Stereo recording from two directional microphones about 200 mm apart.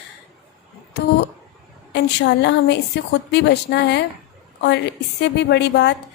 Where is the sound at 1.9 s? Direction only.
60° left (ahead or behind).